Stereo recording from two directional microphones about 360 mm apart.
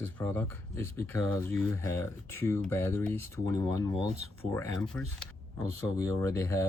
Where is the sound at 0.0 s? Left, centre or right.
Centre.